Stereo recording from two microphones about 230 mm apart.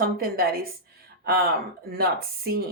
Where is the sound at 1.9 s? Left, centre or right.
Right.